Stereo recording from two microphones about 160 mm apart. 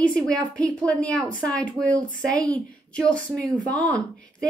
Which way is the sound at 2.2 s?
5° left (ahead or behind).